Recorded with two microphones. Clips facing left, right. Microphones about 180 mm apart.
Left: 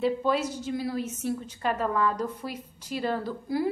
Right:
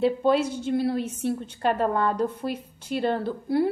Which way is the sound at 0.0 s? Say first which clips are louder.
Right 4 dB; 30° right (ahead or behind).